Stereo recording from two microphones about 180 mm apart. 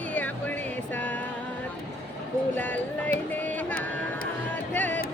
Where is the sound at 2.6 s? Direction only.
10° left (ahead or behind).